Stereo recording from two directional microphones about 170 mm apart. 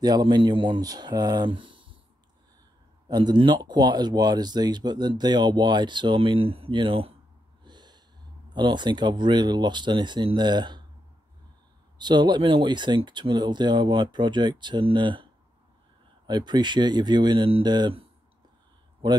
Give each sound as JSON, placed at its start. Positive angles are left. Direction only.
{"t": 0.0, "sound": "speech", "side_deg": -25}
{"t": 3.1, "sound": "speech", "side_deg": -25}
{"t": 7.6, "sound": "snort", "side_deg": -25}
{"t": 8.5, "sound": "speech", "side_deg": -25}
{"t": 12.0, "sound": "speech", "side_deg": -25}
{"t": 16.3, "sound": "speech", "side_deg": -25}